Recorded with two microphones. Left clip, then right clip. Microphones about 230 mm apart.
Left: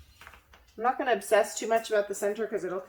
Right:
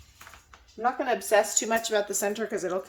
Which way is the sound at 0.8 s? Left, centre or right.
Centre.